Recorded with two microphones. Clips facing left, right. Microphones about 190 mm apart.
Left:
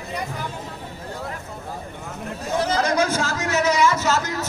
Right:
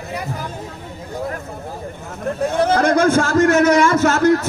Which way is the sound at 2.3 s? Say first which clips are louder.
Right 6 dB; 55° right (ahead or behind).